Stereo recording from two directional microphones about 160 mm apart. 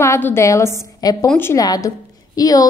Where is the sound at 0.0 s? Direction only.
15° left (ahead or behind).